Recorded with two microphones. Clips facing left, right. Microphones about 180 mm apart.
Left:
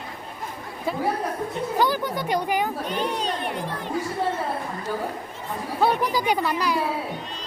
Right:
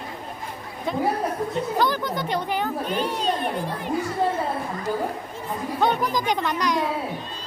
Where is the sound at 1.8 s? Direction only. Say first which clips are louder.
Left 2 dB; 10° left (ahead or behind).